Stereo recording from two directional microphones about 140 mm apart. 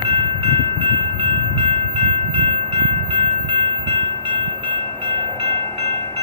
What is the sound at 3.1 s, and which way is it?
Train, 40° right (ahead or behind).